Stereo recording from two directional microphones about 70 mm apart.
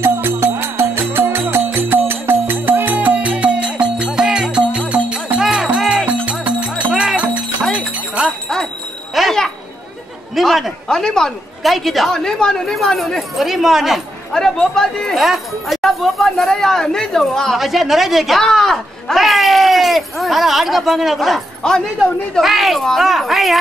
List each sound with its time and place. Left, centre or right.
0.0 s music: right; by 5.4 s centre
5.4 s music: centre
6.2 s music: centre
9.1 s children playing: centre
10.3 s a woman's voice: centre
14.3 s speech: centre
21.6 s speech: centre
22.4 s speech: centre